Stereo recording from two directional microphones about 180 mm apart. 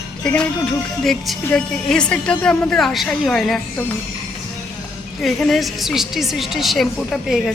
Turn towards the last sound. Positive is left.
turn(degrees=0)  # may be behind; listen again after turning